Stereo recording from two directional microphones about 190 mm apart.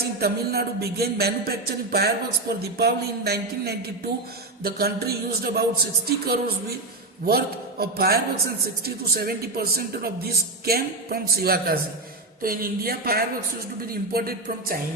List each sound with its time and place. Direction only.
0.0 s a man's voice: 55° right (ahead or behind)